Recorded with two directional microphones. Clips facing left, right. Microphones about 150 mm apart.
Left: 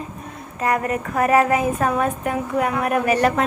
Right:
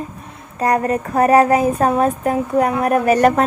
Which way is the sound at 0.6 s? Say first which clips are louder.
Right 4 dB; 35° right (ahead or behind).